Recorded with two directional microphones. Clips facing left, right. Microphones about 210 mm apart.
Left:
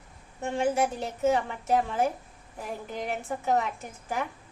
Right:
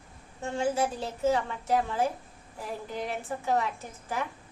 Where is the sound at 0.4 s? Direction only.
15° left (ahead or behind).